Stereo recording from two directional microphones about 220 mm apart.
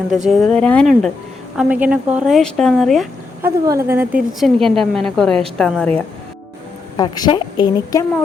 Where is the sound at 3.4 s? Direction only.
15° right (ahead or behind); by 6.0 s 5° left (ahead or behind).